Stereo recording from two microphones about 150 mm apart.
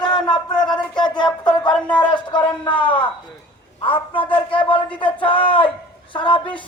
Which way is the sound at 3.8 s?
35° left (ahead or behind).